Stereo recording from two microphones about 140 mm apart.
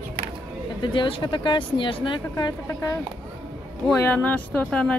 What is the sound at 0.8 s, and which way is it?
Speech, 35° left (ahead or behind).